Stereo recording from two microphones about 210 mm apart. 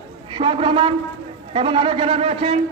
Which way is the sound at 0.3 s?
25° right (ahead or behind).